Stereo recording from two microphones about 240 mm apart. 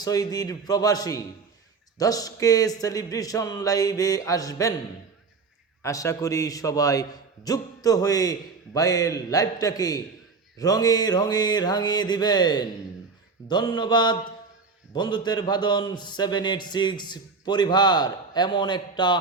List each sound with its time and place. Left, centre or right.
0.0 s a man's voice: centre
5.8 s a man's voice: centre
13.5 s mantra: centre
14.9 s a man's voice: centre